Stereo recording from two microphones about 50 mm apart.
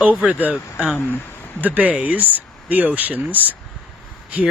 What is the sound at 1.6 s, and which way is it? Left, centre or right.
Speech, right.